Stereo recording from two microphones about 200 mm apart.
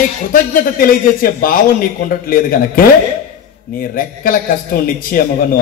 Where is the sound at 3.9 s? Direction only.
45° left (ahead or behind).